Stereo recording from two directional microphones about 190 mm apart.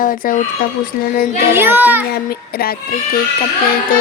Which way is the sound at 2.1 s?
55° left (ahead or behind).